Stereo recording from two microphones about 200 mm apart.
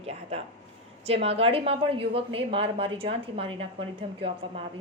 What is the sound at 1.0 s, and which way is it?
A woman's voice, 30° right (ahead or behind).